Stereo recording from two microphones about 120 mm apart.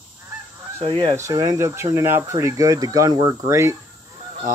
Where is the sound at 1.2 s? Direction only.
30° right (ahead or behind).